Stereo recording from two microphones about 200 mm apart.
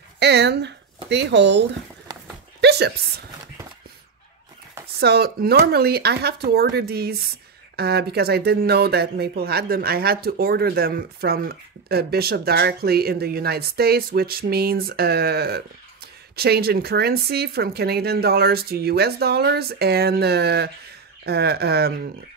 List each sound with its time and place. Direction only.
0.2 s speech: 55° right (ahead or behind)
2.6 s a sound: 55° right (ahead or behind)
4.8 s speech: 55° right (ahead or behind)